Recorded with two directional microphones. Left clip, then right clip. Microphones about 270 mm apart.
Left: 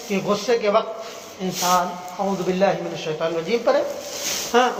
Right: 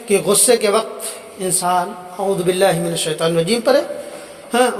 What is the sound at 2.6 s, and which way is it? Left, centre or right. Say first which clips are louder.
Speech: right 5 dB; right.